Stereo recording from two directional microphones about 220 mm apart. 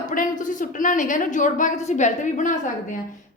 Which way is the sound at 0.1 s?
35° left (ahead or behind).